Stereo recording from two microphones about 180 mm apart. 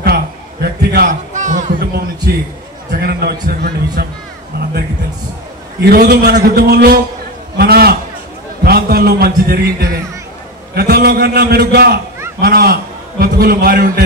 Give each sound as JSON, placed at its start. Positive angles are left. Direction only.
{"t": 0.0, "sound": "a sound", "side_deg": -60}
{"t": 1.3, "sound": "speech", "side_deg": -45}
{"t": 2.9, "sound": "a man's voice", "side_deg": -60}
{"t": 5.8, "sound": "a man's voice", "side_deg": -65}